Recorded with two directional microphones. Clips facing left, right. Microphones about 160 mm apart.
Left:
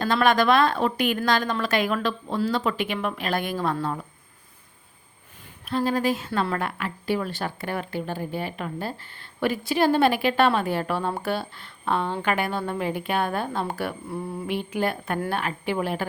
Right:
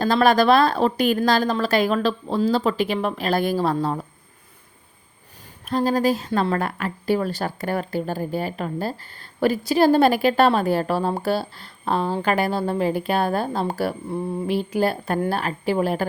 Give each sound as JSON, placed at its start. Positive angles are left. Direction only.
{"t": 0.0, "sound": "a woman's voice", "side_deg": -35}
{"t": 5.6, "sound": "a woman's voice", "side_deg": -40}
{"t": 14.1, "sound": "a woman's voice", "side_deg": -25}